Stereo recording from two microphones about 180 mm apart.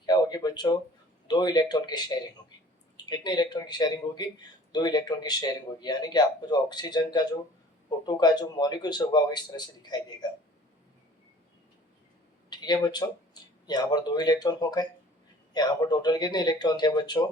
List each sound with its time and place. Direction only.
0.0 s a sound: 20° left (ahead or behind)
1.3 s speech: 25° left (ahead or behind)
12.5 s speech: 25° left (ahead or behind)